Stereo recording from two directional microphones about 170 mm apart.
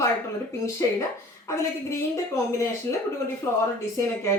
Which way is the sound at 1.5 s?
15° left (ahead or behind).